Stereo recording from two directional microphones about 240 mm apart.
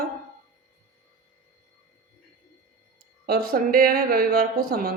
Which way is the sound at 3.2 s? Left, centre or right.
Right.